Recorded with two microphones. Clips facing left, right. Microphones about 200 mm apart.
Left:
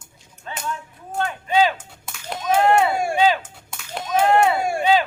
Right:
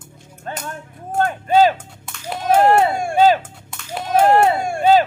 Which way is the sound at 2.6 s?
40° right (ahead or behind).